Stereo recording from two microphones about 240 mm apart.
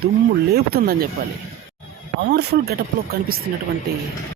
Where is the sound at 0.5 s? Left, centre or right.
Right.